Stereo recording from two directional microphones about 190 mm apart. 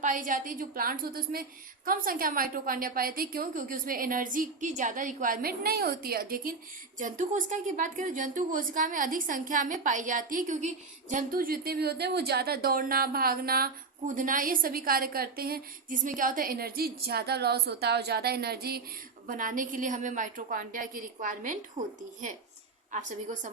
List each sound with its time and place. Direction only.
0.0 s a woman's voice: 45° right (ahead or behind)
19.3 s a woman's voice: 45° right (ahead or behind)